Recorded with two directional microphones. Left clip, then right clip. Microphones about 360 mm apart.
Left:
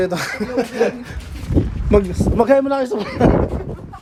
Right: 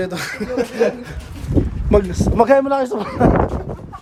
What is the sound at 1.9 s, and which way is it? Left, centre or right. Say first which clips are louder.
Speech: right 1 dB; right.